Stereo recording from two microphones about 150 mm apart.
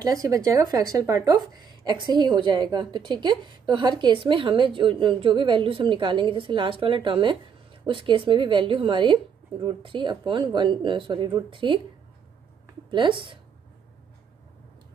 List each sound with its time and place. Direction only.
0.0 s a woman's voice: 25° right (ahead or behind)
12.9 s a woman's voice: 35° right (ahead or behind)